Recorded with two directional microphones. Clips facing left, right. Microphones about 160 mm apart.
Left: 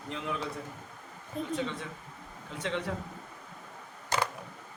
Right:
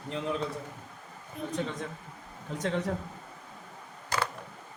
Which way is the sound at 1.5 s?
40° right (ahead or behind).